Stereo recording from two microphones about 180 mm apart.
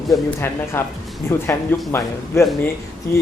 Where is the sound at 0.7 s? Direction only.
15° left (ahead or behind).